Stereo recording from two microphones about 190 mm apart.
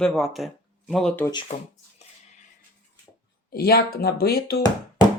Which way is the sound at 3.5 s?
55° left (ahead or behind).